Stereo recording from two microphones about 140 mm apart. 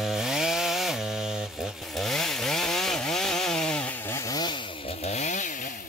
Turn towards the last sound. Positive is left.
turn(degrees=60)  # may be behind; listen again after turning